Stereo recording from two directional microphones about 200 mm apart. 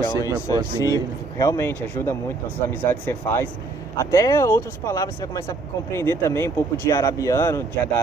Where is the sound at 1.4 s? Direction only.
15° left (ahead or behind).